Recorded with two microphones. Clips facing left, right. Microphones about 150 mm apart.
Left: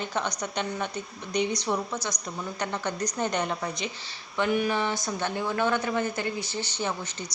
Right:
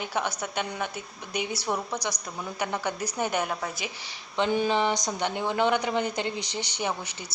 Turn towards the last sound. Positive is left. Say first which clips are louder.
# even
turn(degrees=-10)  # may be behind; listen again after turning